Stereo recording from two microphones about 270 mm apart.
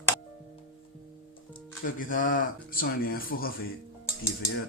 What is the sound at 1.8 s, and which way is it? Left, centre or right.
Speech, left.